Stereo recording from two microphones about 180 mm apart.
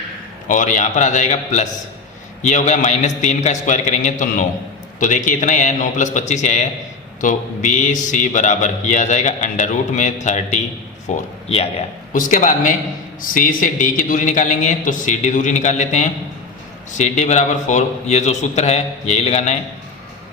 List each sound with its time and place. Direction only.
0.4 s a man's voice: 45° left (ahead or behind)
12.1 s a man's voice: 45° left (ahead or behind)